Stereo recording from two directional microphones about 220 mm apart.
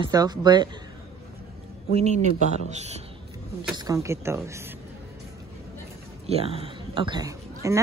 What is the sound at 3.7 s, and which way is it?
Speech, 15° right (ahead or behind).